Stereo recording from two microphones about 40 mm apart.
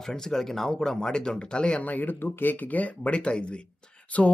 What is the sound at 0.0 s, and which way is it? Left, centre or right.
Speech, centre.